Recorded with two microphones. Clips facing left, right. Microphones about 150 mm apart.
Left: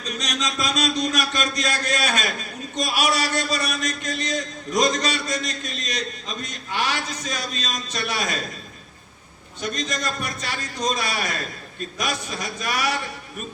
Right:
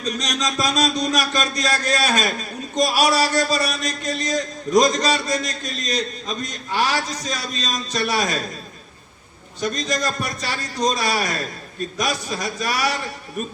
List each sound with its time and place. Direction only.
0.2 s a man's voice: 35° right (ahead or behind)
9.6 s a man's voice: 35° right (ahead or behind)